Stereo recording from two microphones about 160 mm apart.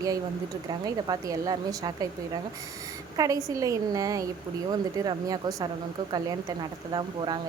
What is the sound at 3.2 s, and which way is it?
Speech, 20° right (ahead or behind).